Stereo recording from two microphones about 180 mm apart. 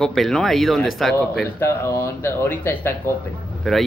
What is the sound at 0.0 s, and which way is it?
Speech, centre (ahead or behind).